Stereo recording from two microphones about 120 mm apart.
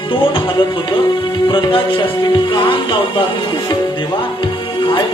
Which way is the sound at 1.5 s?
45° left (ahead or behind).